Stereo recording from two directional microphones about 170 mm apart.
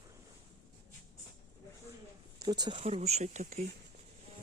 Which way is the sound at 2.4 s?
25° right (ahead or behind).